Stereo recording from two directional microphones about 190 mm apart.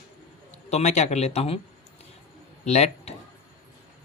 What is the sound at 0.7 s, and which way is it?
Speech, 35° left (ahead or behind).